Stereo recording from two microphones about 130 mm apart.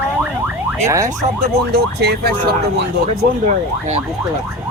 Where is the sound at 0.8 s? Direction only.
25° right (ahead or behind).